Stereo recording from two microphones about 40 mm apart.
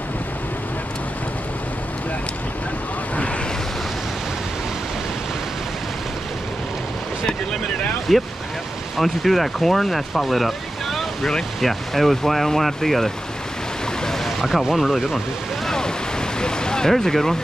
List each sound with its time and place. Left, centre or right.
8.1 s speech: centre
15.6 s waves: centre
16.9 s speech: centre